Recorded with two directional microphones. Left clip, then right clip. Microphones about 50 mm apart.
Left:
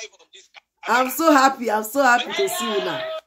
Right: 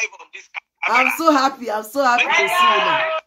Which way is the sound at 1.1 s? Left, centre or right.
Left.